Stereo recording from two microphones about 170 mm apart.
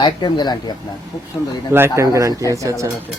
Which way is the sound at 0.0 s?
25° left (ahead or behind).